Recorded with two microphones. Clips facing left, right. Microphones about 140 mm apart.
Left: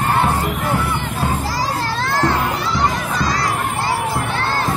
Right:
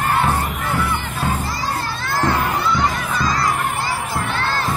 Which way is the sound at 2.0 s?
90° left.